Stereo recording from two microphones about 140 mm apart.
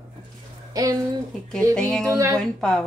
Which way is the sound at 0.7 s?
25° right (ahead or behind).